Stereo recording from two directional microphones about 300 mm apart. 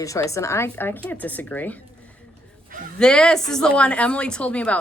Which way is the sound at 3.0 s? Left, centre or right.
Centre.